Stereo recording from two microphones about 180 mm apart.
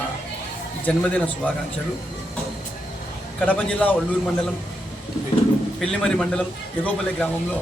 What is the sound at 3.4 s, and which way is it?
Speech, 5° left (ahead or behind).